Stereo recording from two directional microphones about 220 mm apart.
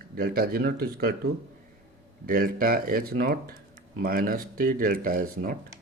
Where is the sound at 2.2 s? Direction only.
40° right (ahead or behind).